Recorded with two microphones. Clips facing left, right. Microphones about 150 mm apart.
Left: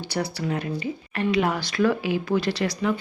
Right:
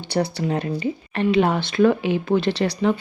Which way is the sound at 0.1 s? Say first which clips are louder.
Right 5 dB; 30° right (ahead or behind).